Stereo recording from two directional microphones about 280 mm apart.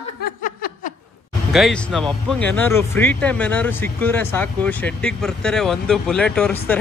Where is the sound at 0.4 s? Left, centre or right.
Left.